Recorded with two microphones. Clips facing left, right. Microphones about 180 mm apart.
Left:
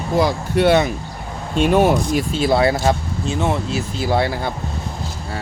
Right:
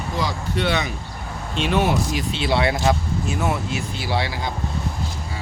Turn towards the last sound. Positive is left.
turn(degrees=45)  # may be behind; listen again after turning